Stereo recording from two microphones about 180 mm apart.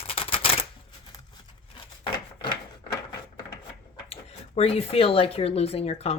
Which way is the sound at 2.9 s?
20° left (ahead or behind).